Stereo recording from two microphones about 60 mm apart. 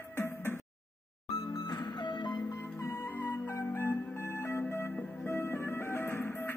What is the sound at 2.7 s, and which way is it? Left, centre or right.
Music, left.